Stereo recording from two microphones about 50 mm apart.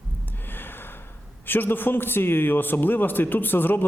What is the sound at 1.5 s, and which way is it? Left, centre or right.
A man's voice, left.